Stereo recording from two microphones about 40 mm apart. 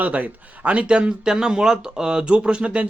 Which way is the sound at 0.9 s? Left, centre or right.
Right.